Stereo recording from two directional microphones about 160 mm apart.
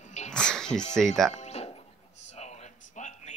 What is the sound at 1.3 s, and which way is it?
Music, 40° left (ahead or behind).